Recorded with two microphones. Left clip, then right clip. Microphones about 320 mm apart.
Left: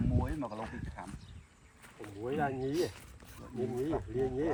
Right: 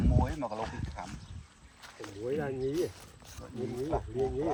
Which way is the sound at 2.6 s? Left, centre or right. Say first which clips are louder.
Right 2 dB; centre.